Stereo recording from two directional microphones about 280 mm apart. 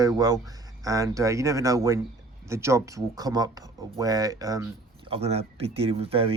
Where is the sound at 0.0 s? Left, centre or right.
Centre.